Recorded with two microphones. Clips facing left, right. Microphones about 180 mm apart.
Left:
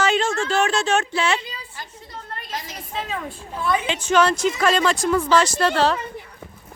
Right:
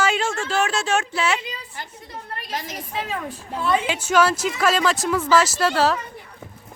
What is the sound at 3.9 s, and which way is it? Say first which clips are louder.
Speech: left 3 dB; 10° right (ahead or behind).